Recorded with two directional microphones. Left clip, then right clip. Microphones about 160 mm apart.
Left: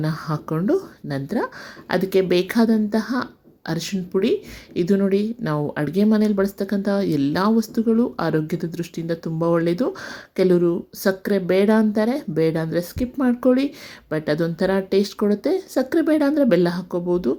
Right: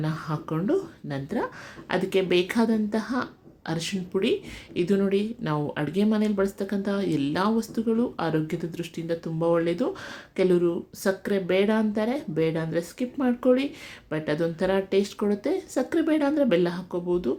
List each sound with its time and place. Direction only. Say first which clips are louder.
0.0 s speech: left 4 dB; 40° left (ahead or behind)